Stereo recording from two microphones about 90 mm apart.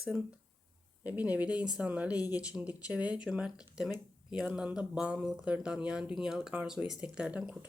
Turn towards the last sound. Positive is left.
turn(degrees=-15)  # may be behind; listen again after turning